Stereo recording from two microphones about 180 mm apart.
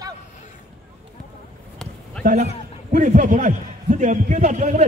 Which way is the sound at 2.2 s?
45° right (ahead or behind).